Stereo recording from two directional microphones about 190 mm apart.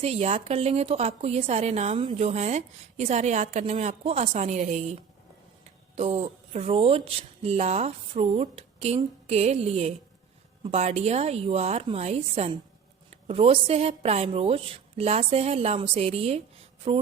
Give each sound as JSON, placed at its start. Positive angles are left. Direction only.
{"t": 0.0, "sound": "a woman's voice", "side_deg": -30}